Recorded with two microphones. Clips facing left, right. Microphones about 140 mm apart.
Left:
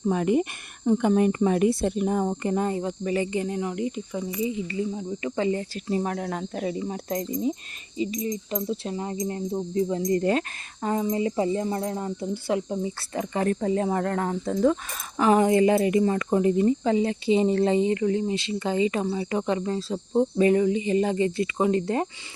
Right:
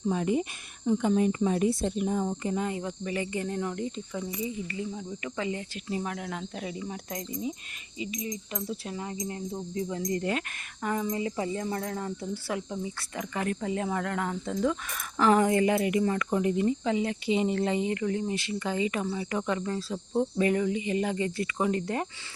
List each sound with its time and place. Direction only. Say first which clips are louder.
0.0 s speech: left 5 dB; 60° left (ahead or behind)
2.6 s cricket: left 6 dB; 35° left (ahead or behind)
3.4 s cricket: left 4 dB; 10° left (ahead or behind); by 7.5 s 40° left (ahead or behind)
7.9 s speech: left 7 dB; 35° left (ahead or behind)
14.9 s speech: left 3 dB; 20° left (ahead or behind)